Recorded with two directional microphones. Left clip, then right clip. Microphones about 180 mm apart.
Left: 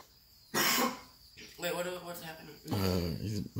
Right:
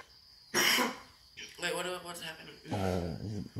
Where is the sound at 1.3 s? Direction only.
30° left (ahead or behind).